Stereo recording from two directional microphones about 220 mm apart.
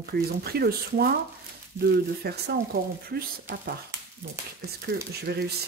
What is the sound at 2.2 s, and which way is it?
Speech, 45° right (ahead or behind).